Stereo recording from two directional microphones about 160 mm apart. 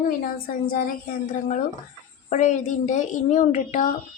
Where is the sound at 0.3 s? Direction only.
65° left (ahead or behind).